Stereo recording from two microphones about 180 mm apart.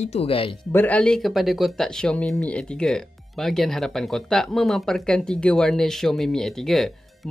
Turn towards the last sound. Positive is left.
turn(degrees=0)  # may be behind; listen again after turning